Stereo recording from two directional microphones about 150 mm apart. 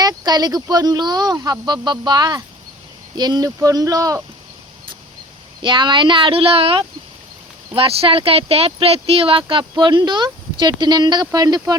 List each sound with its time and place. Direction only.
0.0 s speech: 25° right (ahead or behind)
5.6 s speech: 30° right (ahead or behind)